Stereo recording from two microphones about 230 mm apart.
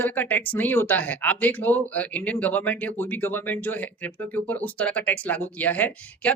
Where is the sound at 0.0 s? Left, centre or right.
Centre.